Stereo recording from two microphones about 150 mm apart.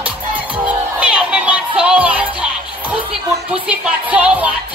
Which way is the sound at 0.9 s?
10° right (ahead or behind).